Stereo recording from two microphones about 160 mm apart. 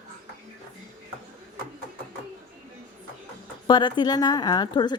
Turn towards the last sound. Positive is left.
turn(degrees=30)  # may be behind; listen again after turning